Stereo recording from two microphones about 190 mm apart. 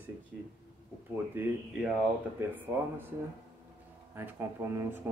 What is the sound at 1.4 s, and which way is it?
Speech, 10° right (ahead or behind).